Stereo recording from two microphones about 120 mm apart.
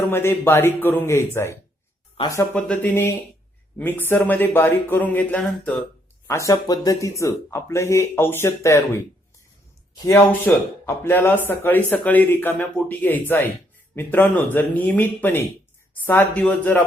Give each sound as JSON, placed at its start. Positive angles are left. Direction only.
{"t": 0.1, "sound": "speech", "side_deg": 20}
{"t": 2.2, "sound": "speech", "side_deg": 50}
{"t": 2.5, "sound": "speech", "side_deg": 10}
{"t": 5.4, "sound": "speech", "side_deg": 5}
{"t": 6.2, "sound": "speech", "side_deg": 25}
{"t": 10.1, "sound": "speech", "side_deg": 20}